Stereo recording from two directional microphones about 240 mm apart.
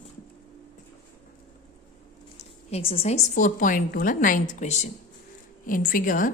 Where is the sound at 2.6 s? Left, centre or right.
Left.